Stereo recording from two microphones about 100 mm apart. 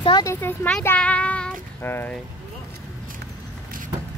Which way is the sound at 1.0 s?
10° left (ahead or behind).